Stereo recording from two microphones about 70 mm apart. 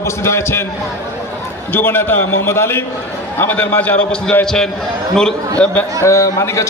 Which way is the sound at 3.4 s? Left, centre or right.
Left.